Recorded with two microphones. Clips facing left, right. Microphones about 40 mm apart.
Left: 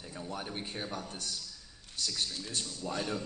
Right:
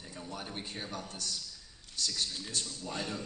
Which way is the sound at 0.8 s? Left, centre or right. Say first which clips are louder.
Left 1 dB; left.